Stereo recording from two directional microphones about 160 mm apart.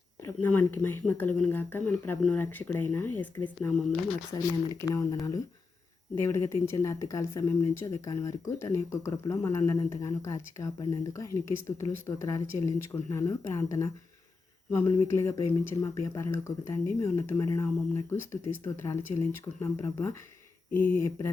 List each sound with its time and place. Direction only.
0.4 s speech: 10° left (ahead or behind)
6.1 s speech: 15° left (ahead or behind)